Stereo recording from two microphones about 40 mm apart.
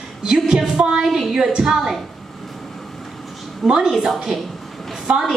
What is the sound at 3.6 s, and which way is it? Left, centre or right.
Speech, centre.